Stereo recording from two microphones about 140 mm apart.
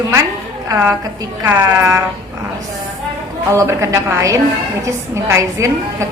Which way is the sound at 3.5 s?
20° right (ahead or behind).